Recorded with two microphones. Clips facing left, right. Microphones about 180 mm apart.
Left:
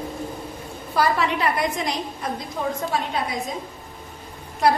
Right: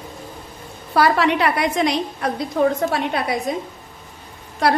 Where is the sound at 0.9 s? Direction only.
70° right (ahead or behind).